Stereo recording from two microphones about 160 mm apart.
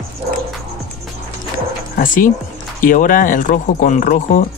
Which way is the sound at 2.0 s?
60° left (ahead or behind).